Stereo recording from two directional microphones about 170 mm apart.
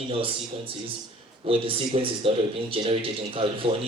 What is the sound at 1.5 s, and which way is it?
Speech, 30° right (ahead or behind).